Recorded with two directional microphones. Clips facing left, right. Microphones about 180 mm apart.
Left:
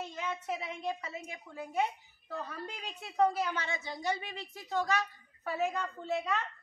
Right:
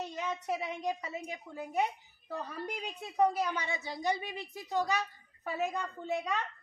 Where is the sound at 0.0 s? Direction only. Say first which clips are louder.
Right 1 dB; 15° right (ahead or behind).